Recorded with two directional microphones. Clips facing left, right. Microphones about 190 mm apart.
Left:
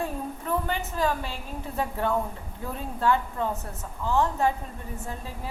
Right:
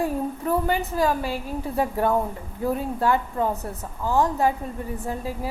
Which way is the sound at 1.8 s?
40° right (ahead or behind).